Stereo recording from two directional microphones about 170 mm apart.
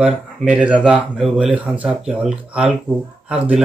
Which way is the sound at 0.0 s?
5° right (ahead or behind).